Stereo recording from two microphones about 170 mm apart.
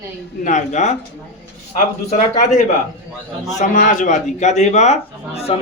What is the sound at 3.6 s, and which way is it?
A man's voice, 50° left (ahead or behind).